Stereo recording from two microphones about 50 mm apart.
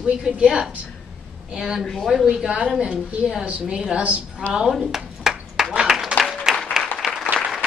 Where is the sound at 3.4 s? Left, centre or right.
Right.